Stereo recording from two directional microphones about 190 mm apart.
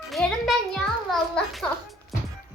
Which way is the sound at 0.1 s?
Centre (ahead or behind).